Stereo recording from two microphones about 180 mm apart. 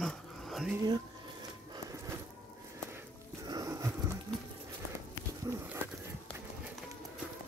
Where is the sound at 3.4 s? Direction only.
20° right (ahead or behind).